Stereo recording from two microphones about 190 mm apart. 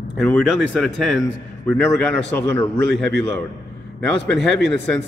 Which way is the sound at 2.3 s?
15° left (ahead or behind).